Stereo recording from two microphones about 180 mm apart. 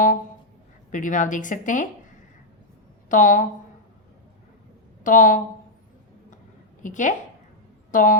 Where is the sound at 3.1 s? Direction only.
45° left (ahead or behind).